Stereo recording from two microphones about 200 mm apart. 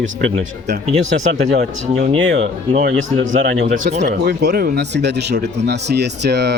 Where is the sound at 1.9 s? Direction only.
35° right (ahead or behind).